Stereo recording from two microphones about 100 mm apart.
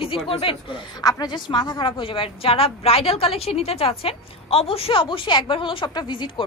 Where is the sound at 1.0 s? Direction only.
45° left (ahead or behind).